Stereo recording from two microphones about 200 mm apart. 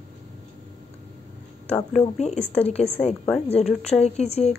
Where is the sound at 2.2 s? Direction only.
30° left (ahead or behind).